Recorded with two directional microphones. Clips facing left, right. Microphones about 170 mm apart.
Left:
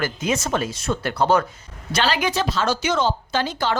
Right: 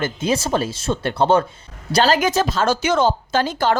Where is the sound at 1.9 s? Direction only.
40° right (ahead or behind).